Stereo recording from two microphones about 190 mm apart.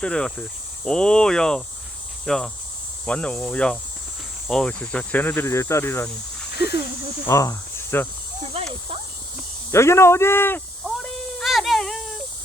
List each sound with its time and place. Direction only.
0.0 s speech: 5° left (ahead or behind)
4.4 s cricket: 5° left (ahead or behind)
7.3 s speech: 15° left (ahead or behind)
8.6 s a sound: 30° right (ahead or behind)
9.7 s cricket: 15° left (ahead or behind)
10.8 s cat: centre (ahead or behind)